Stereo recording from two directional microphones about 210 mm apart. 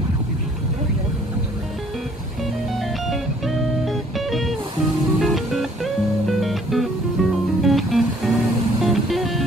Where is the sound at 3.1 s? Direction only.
Centre (ahead or behind).